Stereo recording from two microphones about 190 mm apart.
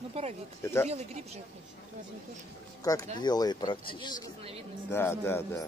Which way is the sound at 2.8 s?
20° left (ahead or behind).